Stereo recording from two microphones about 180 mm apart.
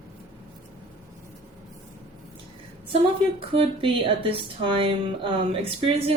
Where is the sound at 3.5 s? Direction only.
30° right (ahead or behind).